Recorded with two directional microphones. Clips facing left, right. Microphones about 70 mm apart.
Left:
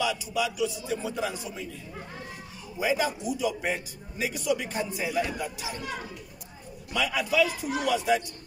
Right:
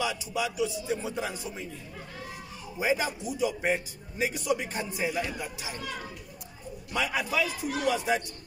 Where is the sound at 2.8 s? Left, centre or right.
Right.